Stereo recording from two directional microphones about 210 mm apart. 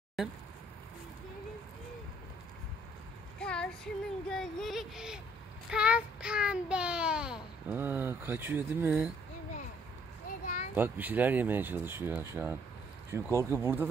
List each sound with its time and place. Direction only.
3.3 s speech: 5° left (ahead or behind)
5.7 s child singing: 5° right (ahead or behind)
7.6 s speech: 10° right (ahead or behind)
10.2 s a sound: 40° left (ahead or behind)
10.8 s speech: 10° right (ahead or behind)